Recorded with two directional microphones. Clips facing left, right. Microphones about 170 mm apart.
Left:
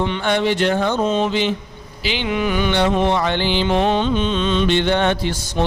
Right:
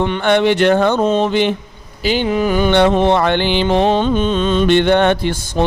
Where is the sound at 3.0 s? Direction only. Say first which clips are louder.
Right 5 dB; 60° right (ahead or behind).